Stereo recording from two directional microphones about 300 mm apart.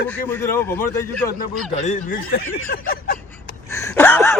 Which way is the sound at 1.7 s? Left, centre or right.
Left.